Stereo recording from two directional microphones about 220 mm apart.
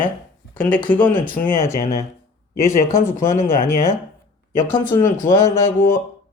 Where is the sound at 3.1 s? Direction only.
35° left (ahead or behind).